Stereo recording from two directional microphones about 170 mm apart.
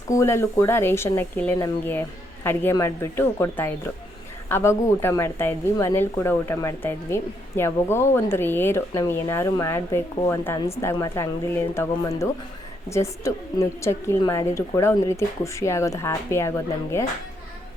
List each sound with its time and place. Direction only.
0.1 s a woman's voice: 15° left (ahead or behind)